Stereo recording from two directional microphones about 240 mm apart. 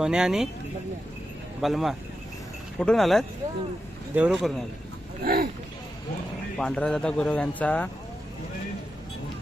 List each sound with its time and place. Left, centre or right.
0.0 s a man's voice: centre
1.6 s a man's voice: centre
5.2 s speech: right
6.6 s a man's voice: centre